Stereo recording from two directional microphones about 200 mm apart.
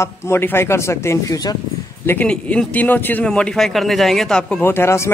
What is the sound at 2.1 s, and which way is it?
Speech, 5° left (ahead or behind).